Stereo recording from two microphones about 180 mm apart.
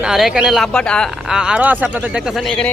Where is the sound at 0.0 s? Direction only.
Centre (ahead or behind).